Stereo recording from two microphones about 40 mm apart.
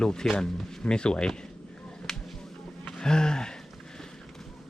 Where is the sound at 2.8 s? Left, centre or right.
Left.